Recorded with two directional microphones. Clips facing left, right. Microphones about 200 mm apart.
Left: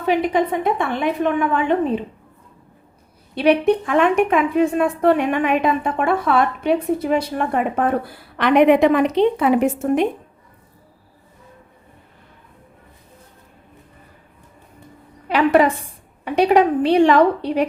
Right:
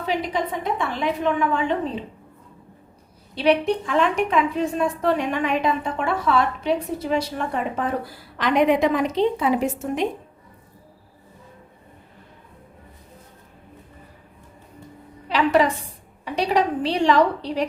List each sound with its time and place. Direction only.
0.0 s a woman's voice: 55° left (ahead or behind)
3.3 s a woman's voice: 55° left (ahead or behind)
15.3 s a woman's voice: 55° left (ahead or behind)